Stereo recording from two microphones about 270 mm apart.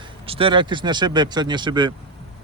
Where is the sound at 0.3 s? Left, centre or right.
Centre.